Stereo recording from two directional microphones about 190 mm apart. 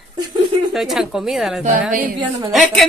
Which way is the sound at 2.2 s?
25° right (ahead or behind).